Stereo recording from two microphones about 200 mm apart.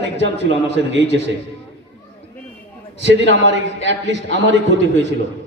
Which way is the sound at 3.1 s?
60° right (ahead or behind).